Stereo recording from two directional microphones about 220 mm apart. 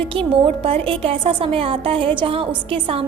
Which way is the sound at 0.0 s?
25° right (ahead or behind).